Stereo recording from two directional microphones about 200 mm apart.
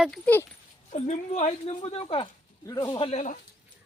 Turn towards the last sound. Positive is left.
turn(degrees=35)  # may be behind; listen again after turning